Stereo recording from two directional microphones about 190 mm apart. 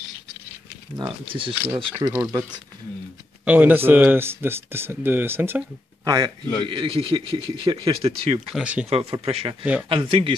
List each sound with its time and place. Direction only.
0.9 s a man's voice: 25° right (ahead or behind)
3.4 s a man's voice: 10° right (ahead or behind); by 8.4 s 30° right (ahead or behind)
8.5 s speech: 5° right (ahead or behind)
8.8 s a man's voice: 30° right (ahead or behind)